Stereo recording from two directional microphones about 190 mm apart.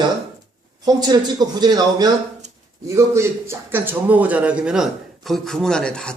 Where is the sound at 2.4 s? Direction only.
40° right (ahead or behind).